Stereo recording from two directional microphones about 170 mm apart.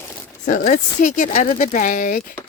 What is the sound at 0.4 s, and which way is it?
Speech, 50° left (ahead or behind).